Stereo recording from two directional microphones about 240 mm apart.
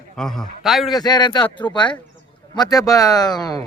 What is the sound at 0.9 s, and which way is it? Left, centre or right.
Speech, centre.